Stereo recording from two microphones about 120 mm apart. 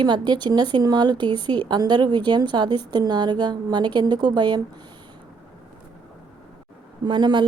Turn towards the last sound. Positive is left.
turn(degrees=-40)  # may be behind; listen again after turning